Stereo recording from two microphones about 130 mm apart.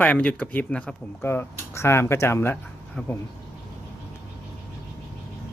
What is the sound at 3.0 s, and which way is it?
Speech, centre (ahead or behind).